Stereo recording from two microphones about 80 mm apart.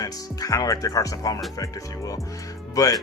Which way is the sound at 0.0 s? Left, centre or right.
Left.